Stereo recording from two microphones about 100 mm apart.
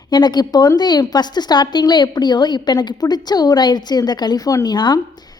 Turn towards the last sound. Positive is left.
turn(degrees=45)  # may be behind; listen again after turning